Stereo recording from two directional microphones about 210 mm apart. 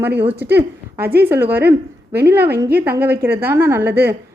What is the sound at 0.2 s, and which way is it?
A woman's voice, 10° right (ahead or behind).